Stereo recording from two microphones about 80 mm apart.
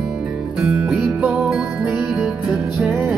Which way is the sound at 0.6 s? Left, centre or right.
Centre.